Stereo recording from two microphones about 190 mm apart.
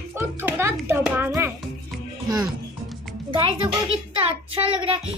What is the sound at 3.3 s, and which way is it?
Speech, 30° right (ahead or behind).